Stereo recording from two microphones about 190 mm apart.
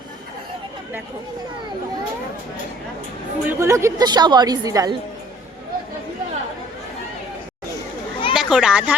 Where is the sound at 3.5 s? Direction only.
15° right (ahead or behind).